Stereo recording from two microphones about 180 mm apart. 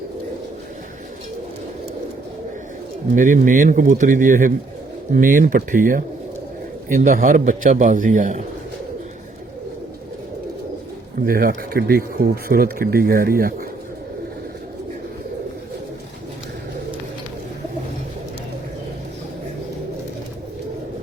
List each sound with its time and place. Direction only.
3.2 s a man's voice: 45° right (ahead or behind)
11.3 s speech: 55° right (ahead or behind)